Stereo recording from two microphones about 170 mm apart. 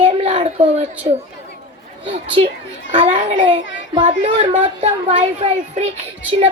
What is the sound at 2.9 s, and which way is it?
A woman's voice, 30° right (ahead or behind).